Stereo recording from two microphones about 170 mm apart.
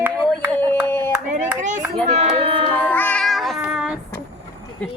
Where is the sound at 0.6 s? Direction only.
15° left (ahead or behind).